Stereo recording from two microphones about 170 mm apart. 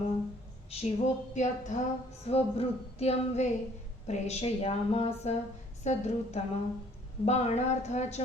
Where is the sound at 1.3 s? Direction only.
45° left (ahead or behind).